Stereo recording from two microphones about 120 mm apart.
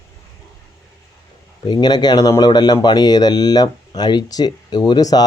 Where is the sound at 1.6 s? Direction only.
35° left (ahead or behind).